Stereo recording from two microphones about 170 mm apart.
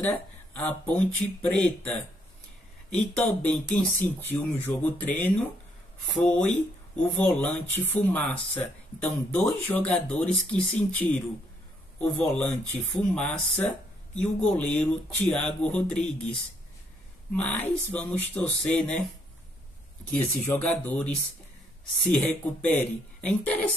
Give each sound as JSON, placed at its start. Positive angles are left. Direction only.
{"t": 0.0, "sound": "speech", "side_deg": 10}
{"t": 17.3, "sound": "speech", "side_deg": 10}
{"t": 20.4, "sound": "speech", "side_deg": 10}